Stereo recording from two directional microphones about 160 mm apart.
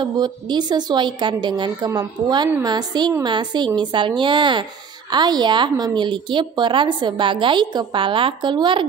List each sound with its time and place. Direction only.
0.0 s a woman's voice: 25° right (ahead or behind)